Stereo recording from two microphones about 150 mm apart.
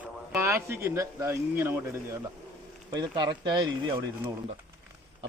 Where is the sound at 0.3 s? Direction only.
20° right (ahead or behind).